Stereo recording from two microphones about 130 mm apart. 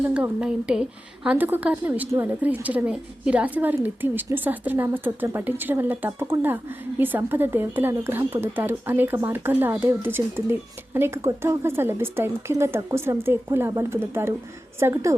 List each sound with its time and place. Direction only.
0.1 s a woman's voice: 10° right (ahead or behind)